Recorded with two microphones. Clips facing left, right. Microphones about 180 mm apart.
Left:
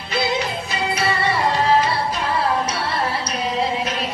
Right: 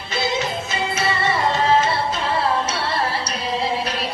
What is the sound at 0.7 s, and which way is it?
Music, 25° right (ahead or behind).